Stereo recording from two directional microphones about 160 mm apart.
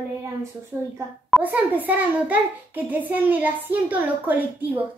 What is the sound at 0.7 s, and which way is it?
A woman's voice, 15° right (ahead or behind).